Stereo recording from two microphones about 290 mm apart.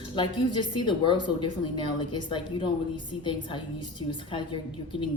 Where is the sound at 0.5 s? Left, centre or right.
Centre.